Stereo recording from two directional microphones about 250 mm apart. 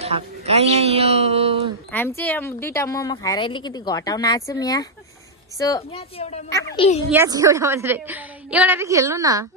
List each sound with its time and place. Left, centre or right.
0.0 s speech: right
1.9 s a woman's voice: centre
7.1 s a woman's voice: centre